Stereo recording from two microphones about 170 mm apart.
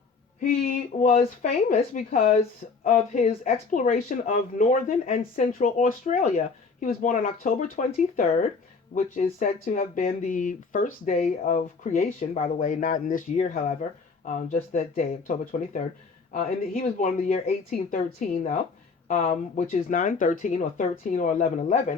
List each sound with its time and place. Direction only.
0.3 s speech: 55° left (ahead or behind)
2.1 s speech: 35° left (ahead or behind)
2.9 s speech: 50° left (ahead or behind)
4.7 s speech: 40° left (ahead or behind)
5.5 s speech: 50° left (ahead or behind)
9.5 s speech: 50° left (ahead or behind)